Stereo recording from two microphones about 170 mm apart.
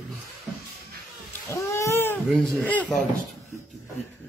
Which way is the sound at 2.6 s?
5° left (ahead or behind).